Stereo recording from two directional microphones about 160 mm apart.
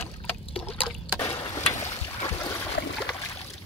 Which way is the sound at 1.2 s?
25° left (ahead or behind).